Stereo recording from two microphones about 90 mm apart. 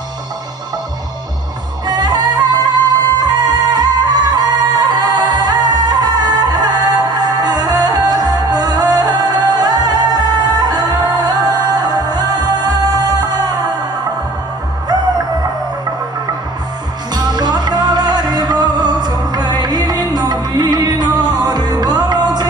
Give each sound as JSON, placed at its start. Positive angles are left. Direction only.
{"t": 1.9, "sound": "music", "side_deg": -50}
{"t": 17.1, "sound": "music", "side_deg": -50}